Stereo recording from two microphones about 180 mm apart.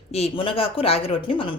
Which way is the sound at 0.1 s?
30° left (ahead or behind).